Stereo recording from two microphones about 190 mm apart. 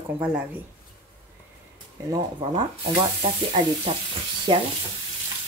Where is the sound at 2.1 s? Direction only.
25° right (ahead or behind).